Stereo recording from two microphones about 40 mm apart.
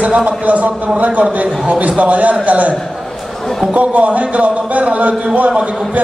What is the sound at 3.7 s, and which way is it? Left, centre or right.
A man's voice, right.